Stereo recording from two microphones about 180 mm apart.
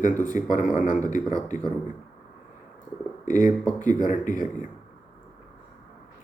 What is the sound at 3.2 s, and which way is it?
Speech, 45° left (ahead or behind).